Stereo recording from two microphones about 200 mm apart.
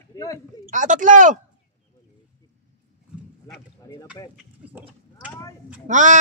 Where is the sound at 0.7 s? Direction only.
40° right (ahead or behind).